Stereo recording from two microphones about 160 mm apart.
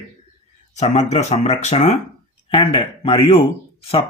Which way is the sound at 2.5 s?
35° left (ahead or behind).